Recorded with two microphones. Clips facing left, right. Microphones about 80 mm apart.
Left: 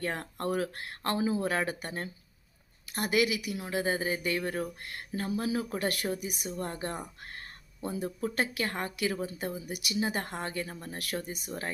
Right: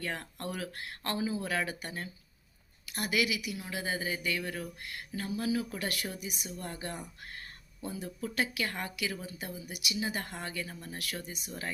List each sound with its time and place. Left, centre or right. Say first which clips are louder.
0.0 s speech: left 5 dB; left